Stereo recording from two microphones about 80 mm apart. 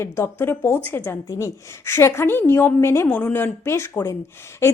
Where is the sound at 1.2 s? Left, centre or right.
Left.